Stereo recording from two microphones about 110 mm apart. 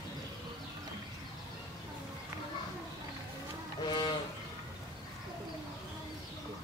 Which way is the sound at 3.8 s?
45° left (ahead or behind).